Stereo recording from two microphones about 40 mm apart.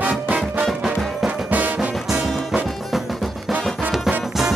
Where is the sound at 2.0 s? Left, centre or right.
Centre.